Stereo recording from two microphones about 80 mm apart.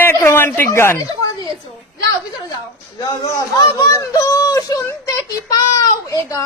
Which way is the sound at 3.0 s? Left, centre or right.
Left.